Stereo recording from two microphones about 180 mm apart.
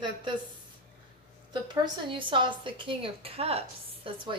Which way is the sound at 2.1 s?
30° right (ahead or behind).